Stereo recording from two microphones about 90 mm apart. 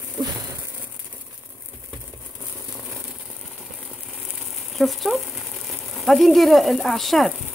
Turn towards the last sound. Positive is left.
turn(degrees=0)  # may be behind; listen again after turning